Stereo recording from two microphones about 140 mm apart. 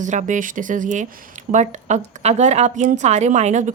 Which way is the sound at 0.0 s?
60° right (ahead or behind).